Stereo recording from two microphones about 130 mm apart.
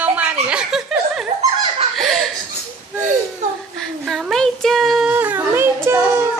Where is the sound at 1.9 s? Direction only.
Centre (ahead or behind).